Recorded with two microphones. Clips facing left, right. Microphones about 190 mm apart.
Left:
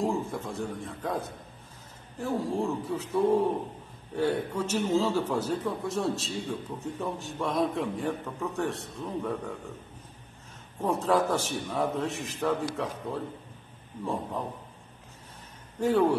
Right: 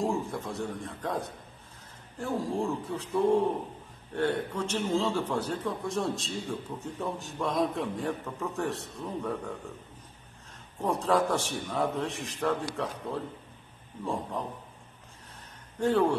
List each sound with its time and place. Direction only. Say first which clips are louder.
0.0 s a man's voice: left 1 dB; centre (ahead or behind)
10.8 s a man's voice: left 1 dB; centre (ahead or behind)
15.8 s speech: left 1 dB; 5° left (ahead or behind)